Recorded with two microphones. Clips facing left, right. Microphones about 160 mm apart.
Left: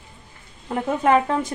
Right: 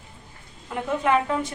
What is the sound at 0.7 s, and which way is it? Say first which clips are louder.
Speech: left 4 dB; 40° left (ahead or behind).